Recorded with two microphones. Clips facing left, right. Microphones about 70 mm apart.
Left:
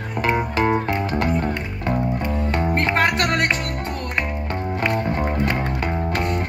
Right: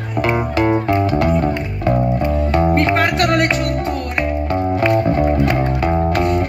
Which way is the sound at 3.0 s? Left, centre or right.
Left.